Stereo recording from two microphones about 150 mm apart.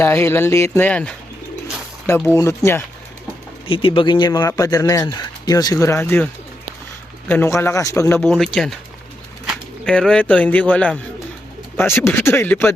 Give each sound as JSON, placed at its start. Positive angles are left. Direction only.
{"t": 0.0, "sound": "a man's voice", "side_deg": 15}
{"t": 3.7, "sound": "speech", "side_deg": 35}
{"t": 7.3, "sound": "a man's voice", "side_deg": 15}
{"t": 8.3, "sound": "speech", "side_deg": 0}
{"t": 9.8, "sound": "a man's voice", "side_deg": 5}